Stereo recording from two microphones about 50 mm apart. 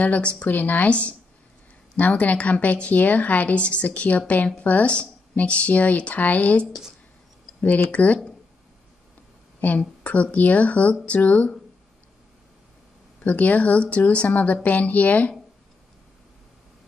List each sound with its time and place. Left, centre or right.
0.0 s a woman's voice: left
0.5 s a woman's voice: left
9.6 s a woman's voice: left
13.2 s a woman's voice: left